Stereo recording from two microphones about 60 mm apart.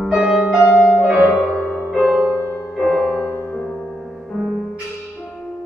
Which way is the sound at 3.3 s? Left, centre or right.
Left.